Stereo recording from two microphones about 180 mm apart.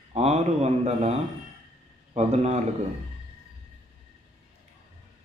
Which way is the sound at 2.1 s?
35° right (ahead or behind).